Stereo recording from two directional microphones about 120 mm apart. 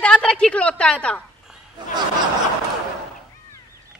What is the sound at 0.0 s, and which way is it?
A woman's voice, 5° left (ahead or behind).